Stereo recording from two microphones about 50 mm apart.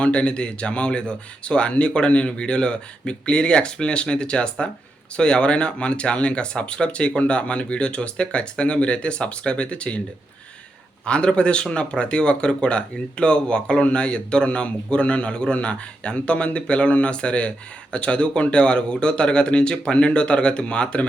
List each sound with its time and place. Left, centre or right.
0.0 s speech: left
11.0 s speech: left